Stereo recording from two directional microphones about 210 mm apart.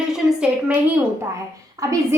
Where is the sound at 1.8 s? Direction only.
15° right (ahead or behind).